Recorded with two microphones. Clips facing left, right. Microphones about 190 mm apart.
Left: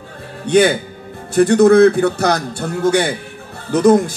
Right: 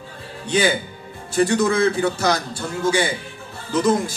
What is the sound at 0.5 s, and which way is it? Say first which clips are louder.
Speech: left 7 dB; 60° left (ahead or behind).